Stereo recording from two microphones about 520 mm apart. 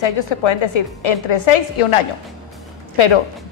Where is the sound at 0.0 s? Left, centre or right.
Left.